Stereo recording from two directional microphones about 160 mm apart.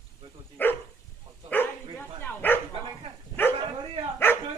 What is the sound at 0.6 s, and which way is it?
Dog, 10° left (ahead or behind).